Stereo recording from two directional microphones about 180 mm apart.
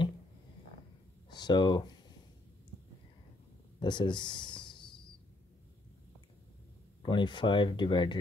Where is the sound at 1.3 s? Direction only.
25° left (ahead or behind).